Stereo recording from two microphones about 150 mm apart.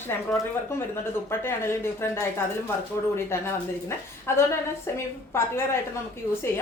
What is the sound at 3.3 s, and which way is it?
A woman's voice, 15° left (ahead or behind).